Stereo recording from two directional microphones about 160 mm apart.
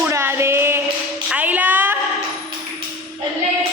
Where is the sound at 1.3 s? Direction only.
10° right (ahead or behind).